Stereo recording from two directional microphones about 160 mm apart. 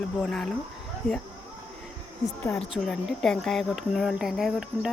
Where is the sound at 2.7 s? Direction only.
5° left (ahead or behind).